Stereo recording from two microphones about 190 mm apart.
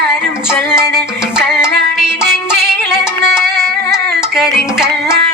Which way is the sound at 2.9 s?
5° right (ahead or behind).